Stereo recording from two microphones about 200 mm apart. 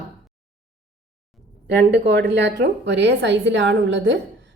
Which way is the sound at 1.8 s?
60° right (ahead or behind).